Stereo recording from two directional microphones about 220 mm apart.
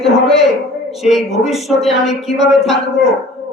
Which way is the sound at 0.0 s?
Centre (ahead or behind).